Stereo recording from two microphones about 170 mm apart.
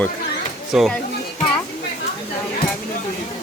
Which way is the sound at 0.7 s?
5° right (ahead or behind).